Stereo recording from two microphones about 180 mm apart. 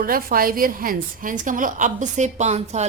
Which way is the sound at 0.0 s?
55° right (ahead or behind).